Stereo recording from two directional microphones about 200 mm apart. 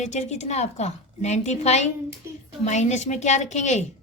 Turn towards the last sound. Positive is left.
turn(degrees=35)  # may be behind; listen again after turning